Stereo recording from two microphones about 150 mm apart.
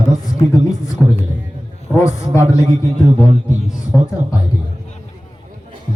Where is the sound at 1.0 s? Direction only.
15° left (ahead or behind).